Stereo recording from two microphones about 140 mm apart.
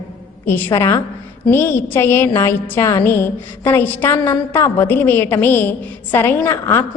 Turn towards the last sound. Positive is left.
turn(degrees=20)  # may be behind; listen again after turning